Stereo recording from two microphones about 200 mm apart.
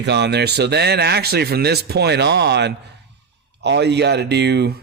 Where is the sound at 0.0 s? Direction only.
60° right (ahead or behind).